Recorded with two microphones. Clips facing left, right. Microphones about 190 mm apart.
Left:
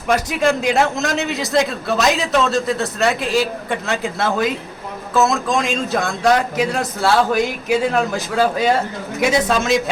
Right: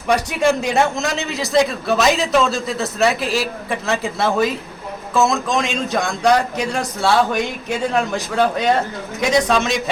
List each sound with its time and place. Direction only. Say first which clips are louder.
0.1 s a man's voice: even; centre (ahead or behind)